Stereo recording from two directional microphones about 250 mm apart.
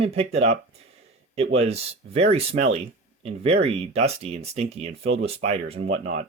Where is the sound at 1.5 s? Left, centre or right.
Right.